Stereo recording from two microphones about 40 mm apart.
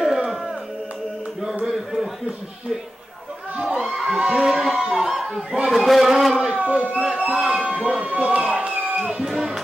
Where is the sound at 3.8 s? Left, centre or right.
Centre.